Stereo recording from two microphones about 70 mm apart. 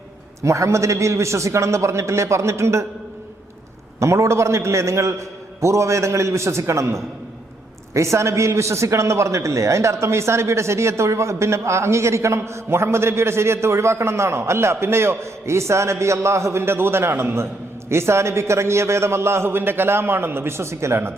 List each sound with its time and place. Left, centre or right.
0.4 s a man's voice: right
4.0 s a man's voice: right